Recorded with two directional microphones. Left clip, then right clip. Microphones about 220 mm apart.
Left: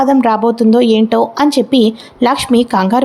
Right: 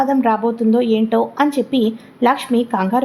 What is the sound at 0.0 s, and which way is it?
A woman's voice, 25° left (ahead or behind).